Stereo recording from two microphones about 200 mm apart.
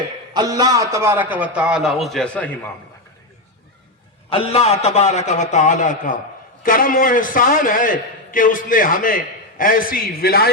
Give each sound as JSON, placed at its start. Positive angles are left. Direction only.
{"t": 0.3, "sound": "a man's voice", "side_deg": -20}
{"t": 4.3, "sound": "a man's voice", "side_deg": 30}